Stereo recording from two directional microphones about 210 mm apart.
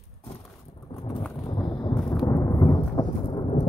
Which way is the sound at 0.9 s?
20° left (ahead or behind).